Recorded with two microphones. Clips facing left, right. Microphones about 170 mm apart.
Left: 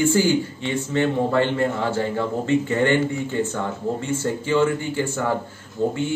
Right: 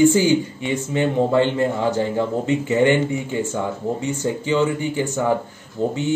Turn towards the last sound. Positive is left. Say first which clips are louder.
# even
turn(degrees=-20)  # may be behind; listen again after turning